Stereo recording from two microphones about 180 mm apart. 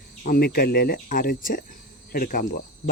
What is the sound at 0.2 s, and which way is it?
Cricket, 60° left (ahead or behind).